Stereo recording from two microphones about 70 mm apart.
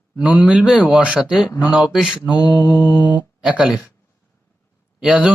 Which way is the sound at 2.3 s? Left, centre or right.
Left.